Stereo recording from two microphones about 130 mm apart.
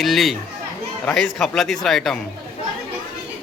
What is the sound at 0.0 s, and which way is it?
A man's voice, centre (ahead or behind).